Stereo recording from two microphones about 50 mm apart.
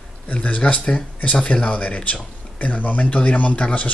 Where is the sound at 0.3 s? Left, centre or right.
Left.